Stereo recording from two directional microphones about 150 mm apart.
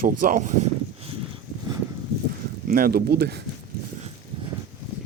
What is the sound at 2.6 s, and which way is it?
Speech, 70° right (ahead or behind).